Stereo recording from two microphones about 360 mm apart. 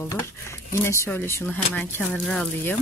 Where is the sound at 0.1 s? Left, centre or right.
Centre.